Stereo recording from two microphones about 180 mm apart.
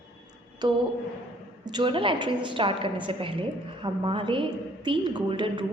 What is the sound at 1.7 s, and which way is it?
A woman's voice, 25° right (ahead or behind).